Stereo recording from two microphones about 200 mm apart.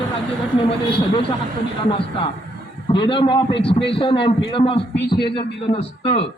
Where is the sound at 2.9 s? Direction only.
25° left (ahead or behind).